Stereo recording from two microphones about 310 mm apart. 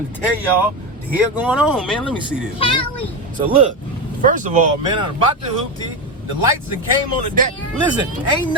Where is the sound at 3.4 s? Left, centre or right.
Centre.